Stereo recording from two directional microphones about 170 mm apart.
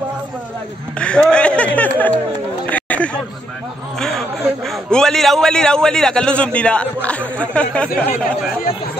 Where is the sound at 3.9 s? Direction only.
Centre (ahead or behind).